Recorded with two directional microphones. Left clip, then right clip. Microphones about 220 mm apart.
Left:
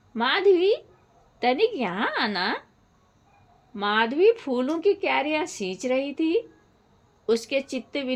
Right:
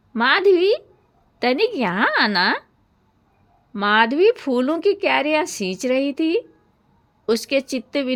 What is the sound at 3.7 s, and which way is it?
Speech, 50° right (ahead or behind).